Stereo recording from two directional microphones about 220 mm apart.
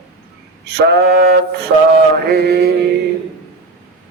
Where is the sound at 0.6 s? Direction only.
45° right (ahead or behind).